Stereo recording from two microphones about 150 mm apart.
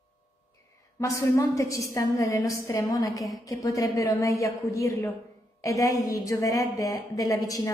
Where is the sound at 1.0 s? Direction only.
20° left (ahead or behind).